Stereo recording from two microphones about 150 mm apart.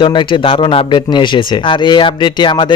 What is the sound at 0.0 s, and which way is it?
A man's voice, 30° left (ahead or behind).